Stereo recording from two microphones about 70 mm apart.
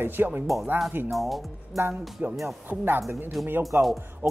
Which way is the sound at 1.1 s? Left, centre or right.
Centre.